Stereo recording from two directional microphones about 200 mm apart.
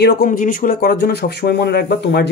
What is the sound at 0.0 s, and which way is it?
Speech, 50° left (ahead or behind).